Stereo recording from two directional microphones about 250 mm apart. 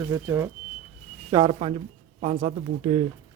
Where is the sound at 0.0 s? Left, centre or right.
Centre.